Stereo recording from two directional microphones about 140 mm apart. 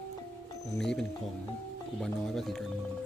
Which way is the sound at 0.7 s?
5° left (ahead or behind).